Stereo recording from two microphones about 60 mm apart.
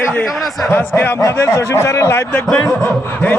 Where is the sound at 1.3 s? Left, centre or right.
Left.